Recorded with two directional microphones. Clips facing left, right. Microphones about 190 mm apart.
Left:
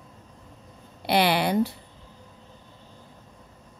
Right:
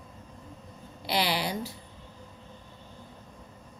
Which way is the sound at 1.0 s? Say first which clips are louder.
Left 7 dB; 60° left (ahead or behind).